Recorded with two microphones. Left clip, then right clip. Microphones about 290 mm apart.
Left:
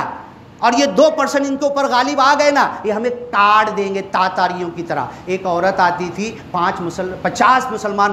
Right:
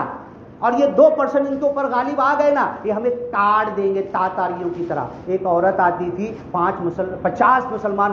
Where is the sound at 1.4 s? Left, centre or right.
Left.